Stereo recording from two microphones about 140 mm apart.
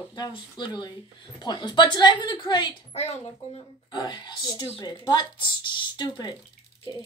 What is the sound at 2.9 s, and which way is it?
Speech, 50° left (ahead or behind).